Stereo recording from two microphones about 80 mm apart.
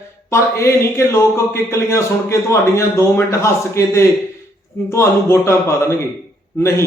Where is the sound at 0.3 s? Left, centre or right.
Left.